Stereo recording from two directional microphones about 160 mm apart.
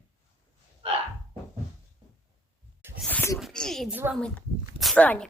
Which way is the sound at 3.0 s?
10° left (ahead or behind).